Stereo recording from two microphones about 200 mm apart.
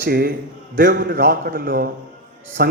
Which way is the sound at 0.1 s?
50° right (ahead or behind).